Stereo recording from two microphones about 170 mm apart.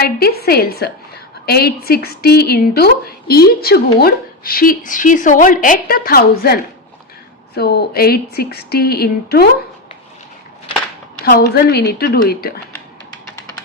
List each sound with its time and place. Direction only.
0.0 s a woman's voice: 65° left (ahead or behind)
7.5 s speech: 75° left (ahead or behind)
11.3 s a woman's voice: 65° left (ahead or behind)